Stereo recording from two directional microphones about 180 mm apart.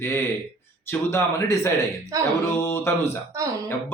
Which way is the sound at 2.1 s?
20° right (ahead or behind).